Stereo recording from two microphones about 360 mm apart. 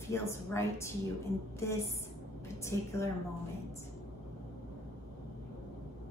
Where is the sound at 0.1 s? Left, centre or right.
Centre.